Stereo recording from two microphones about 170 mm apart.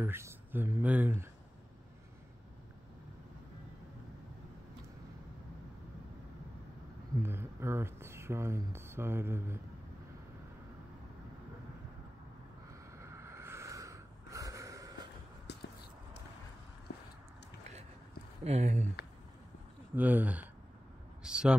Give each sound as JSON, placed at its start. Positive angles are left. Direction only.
{"t": 0.0, "sound": "speech", "side_deg": -15}
{"t": 7.2, "sound": "speech", "side_deg": -15}
{"t": 13.0, "sound": "snort", "side_deg": -15}
{"t": 15.5, "sound": "a sound", "side_deg": 85}
{"t": 18.4, "sound": "speech", "side_deg": -40}
{"t": 20.0, "sound": "speech", "side_deg": -10}